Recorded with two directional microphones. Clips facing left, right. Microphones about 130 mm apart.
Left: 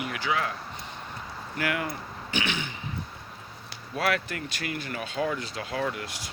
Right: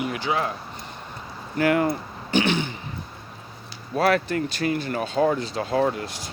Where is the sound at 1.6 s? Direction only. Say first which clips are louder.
Right 10 dB; 35° right (ahead or behind).